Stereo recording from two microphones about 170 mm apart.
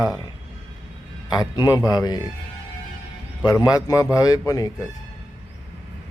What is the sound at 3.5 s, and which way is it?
Speech, 20° left (ahead or behind).